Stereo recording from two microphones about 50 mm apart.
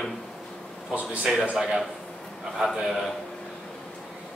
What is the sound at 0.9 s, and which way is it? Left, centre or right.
Speech, right.